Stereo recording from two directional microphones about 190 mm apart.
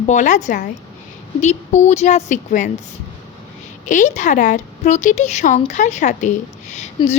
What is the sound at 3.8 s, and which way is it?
A woman's voice, 40° left (ahead or behind).